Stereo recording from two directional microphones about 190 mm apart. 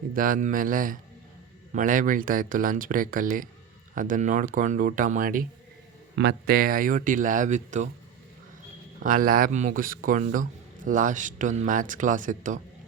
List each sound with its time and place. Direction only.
0.1 s speech: 45° right (ahead or behind)
6.1 s speech: 60° right (ahead or behind); by 7.9 s 40° right (ahead or behind)
9.0 s speech: 45° right (ahead or behind)